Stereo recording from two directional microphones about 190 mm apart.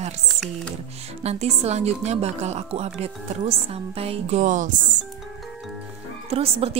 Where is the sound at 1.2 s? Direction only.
35° right (ahead or behind).